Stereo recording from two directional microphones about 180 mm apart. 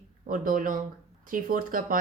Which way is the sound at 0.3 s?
50° right (ahead or behind).